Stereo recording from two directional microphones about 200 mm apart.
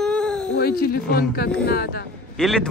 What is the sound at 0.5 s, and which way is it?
Speech, 50° left (ahead or behind).